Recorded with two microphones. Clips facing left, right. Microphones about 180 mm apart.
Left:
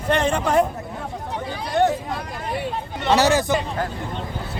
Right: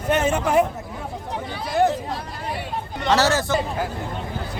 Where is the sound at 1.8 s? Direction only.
Centre (ahead or behind).